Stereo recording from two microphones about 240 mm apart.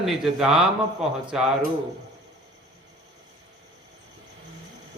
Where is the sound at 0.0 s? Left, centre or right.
Centre.